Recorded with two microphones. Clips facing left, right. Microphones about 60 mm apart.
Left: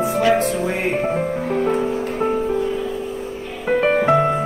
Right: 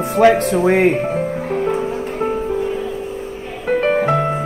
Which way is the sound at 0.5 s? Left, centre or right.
Right.